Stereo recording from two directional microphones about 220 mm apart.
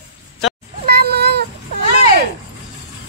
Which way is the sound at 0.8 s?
45° right (ahead or behind).